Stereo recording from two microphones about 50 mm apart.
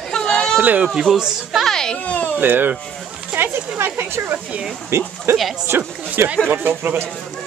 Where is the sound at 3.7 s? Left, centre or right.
Right.